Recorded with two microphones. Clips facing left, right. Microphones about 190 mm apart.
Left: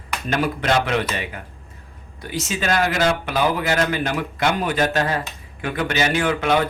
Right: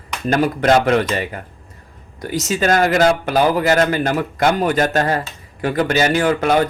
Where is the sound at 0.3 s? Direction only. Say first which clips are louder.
Right 6 dB; 45° right (ahead or behind).